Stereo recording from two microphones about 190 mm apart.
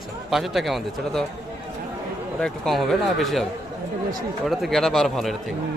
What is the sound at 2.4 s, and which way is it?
A man's voice, centre (ahead or behind).